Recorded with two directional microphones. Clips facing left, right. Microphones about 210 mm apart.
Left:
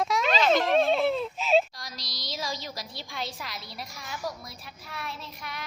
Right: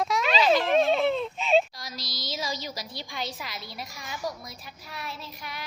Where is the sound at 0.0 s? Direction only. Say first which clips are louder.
Even; centre (ahead or behind).